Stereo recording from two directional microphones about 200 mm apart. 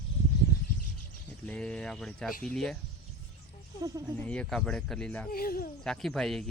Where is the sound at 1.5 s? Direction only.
5° left (ahead or behind).